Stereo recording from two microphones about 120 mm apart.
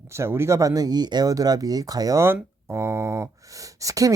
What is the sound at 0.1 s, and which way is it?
Speech, 20° right (ahead or behind).